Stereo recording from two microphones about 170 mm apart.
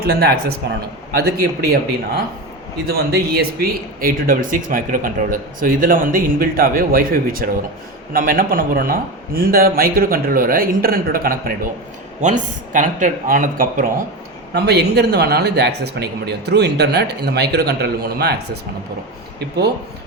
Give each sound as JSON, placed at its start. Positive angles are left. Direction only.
{"t": 0.0, "sound": "a man's voice", "side_deg": -65}
{"t": 2.8, "sound": "a man's voice", "side_deg": -65}
{"t": 14.5, "sound": "speech", "side_deg": -75}